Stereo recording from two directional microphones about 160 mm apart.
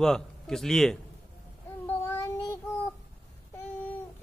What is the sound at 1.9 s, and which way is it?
Child singing, 15° left (ahead or behind).